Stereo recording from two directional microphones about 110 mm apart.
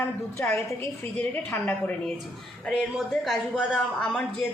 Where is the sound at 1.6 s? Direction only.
10° left (ahead or behind).